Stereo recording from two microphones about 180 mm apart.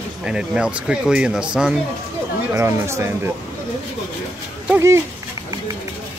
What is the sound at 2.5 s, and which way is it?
Speech, 15° right (ahead or behind).